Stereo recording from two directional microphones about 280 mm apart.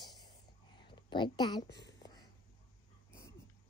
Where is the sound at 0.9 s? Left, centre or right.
Centre.